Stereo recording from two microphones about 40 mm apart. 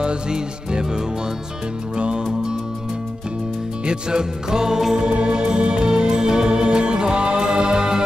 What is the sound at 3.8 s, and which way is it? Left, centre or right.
Music, centre.